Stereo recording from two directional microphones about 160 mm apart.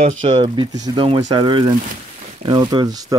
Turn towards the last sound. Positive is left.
turn(degrees=-25)  # may be behind; listen again after turning